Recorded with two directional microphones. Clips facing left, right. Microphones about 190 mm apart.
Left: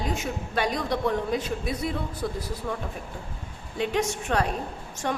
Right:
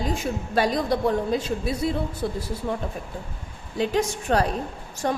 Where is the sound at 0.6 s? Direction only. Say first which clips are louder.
Right 4 dB; 35° right (ahead or behind).